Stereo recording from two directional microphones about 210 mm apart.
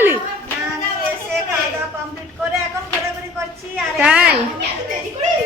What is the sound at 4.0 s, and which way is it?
Speech, 5° right (ahead or behind).